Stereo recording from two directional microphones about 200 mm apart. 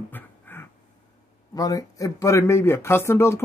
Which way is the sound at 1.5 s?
20° left (ahead or behind).